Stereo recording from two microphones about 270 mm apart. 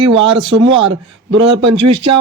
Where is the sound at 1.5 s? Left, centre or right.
Right.